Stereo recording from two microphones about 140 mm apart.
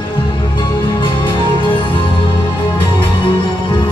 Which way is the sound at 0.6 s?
35° left (ahead or behind).